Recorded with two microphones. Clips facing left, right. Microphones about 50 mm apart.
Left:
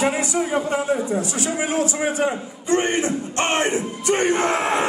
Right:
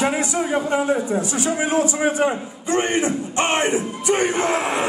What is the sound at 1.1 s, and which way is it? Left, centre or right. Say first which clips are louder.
A man's voice: right 2 dB; right.